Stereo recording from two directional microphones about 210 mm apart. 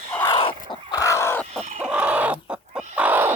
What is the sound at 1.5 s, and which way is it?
Chicken, 30° right (ahead or behind).